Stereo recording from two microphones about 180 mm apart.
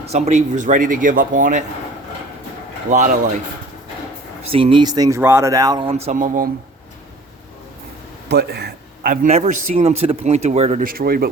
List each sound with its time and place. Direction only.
0.1 s a man's voice: 40° right (ahead or behind)
2.9 s a man's voice: 45° right (ahead or behind)
4.5 s speech: 30° right (ahead or behind)
5.9 s a man's voice: 35° right (ahead or behind)
8.3 s a man's voice: 65° right (ahead or behind)
9.2 s a man's voice: 40° right (ahead or behind)